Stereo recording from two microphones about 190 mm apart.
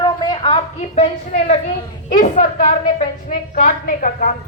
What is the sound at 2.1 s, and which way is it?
A woman's voice, 40° left (ahead or behind).